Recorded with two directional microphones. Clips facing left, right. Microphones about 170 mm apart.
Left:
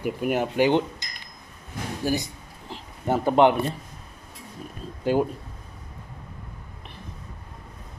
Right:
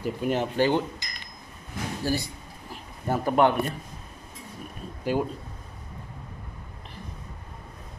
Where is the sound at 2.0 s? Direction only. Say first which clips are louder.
Left 3 dB; 20° left (ahead or behind).